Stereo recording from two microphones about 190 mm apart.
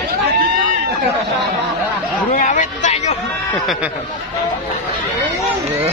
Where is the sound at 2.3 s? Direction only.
40° left (ahead or behind).